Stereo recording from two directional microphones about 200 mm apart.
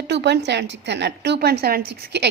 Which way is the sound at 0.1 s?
60° right (ahead or behind).